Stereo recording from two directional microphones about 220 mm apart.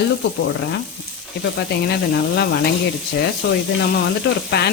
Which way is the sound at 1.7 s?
50° left (ahead or behind).